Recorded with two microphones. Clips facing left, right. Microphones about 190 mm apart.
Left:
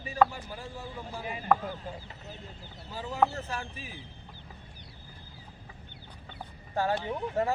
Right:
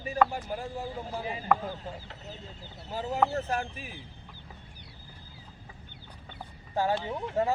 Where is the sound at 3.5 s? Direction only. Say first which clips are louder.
Right 6 dB; 55° right (ahead or behind).